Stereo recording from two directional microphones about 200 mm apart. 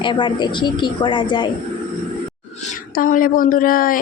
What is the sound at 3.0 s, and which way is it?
Speech, 45° left (ahead or behind).